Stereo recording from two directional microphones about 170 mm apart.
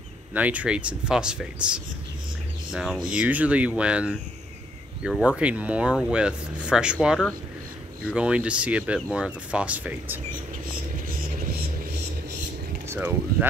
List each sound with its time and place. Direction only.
0.3 s speech: 10° right (ahead or behind)
11.1 s vehicle: 55° right (ahead or behind)
12.8 s speech: 15° right (ahead or behind)